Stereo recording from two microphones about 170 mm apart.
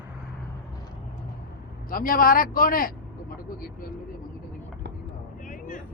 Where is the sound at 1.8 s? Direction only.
55° left (ahead or behind).